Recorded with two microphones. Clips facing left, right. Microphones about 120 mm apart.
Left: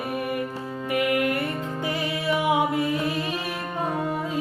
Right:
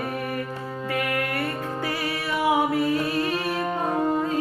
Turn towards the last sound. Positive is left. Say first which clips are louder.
# right 2 dB
turn(degrees=15)  # may be behind; listen again after turning